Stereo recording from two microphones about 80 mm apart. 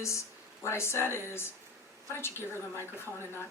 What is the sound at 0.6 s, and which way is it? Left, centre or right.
Speech, left.